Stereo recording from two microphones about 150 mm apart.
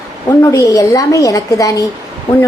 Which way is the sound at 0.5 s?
25° left (ahead or behind).